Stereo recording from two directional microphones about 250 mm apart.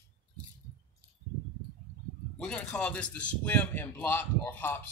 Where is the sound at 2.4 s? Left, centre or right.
Centre.